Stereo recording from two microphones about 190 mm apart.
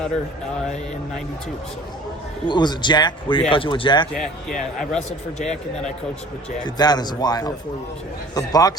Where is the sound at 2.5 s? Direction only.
25° left (ahead or behind).